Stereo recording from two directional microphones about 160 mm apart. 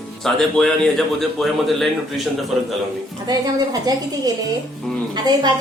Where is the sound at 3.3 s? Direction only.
25° right (ahead or behind).